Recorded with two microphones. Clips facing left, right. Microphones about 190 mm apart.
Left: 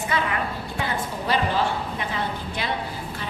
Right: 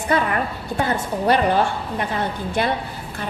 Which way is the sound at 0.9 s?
60° right (ahead or behind).